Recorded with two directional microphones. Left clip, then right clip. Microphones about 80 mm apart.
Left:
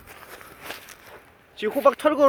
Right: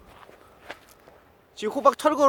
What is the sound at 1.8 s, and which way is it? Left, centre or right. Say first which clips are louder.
Speech: left 1 dB; centre.